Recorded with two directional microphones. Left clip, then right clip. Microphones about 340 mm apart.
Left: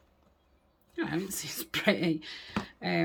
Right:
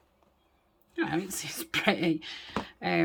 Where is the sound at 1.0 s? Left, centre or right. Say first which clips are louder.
Right 3 dB; centre.